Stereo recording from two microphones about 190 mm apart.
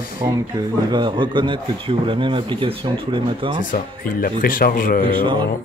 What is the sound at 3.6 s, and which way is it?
Speech, 45° left (ahead or behind).